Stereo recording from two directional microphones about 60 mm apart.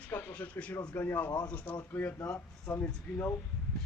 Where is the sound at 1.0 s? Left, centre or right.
Left.